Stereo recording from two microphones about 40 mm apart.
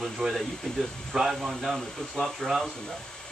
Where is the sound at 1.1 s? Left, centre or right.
Centre.